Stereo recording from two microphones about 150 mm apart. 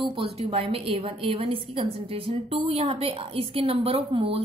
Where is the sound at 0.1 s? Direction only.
40° right (ahead or behind).